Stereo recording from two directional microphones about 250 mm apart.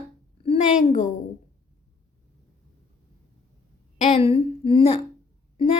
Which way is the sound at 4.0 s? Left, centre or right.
Left.